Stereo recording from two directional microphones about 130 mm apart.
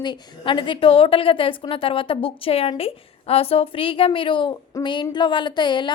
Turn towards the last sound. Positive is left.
turn(degrees=35)  # may be behind; listen again after turning